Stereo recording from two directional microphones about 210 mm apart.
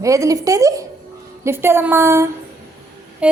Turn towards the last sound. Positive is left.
turn(degrees=-5)  # may be behind; listen again after turning